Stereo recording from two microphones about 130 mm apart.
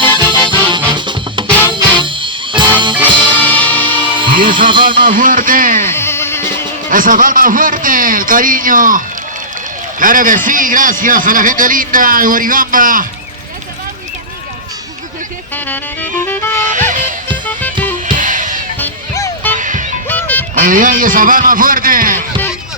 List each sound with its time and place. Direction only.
0.0 s music: 40° right (ahead or behind)
3.4 s music: 10° left (ahead or behind)
4.0 s music: 40° right (ahead or behind)
5.0 s a man's voice: 90° right
5.8 s music: 20° left (ahead or behind)
6.9 s a man's voice: 90° right
15.5 s music: 15° left (ahead or behind)
16.6 s music: 75° right (ahead or behind)
18.0 s music: 85° right
19.5 s music: 75° right (ahead or behind)
20.1 s music: 15° left (ahead or behind)
20.6 s a man's voice: 90° right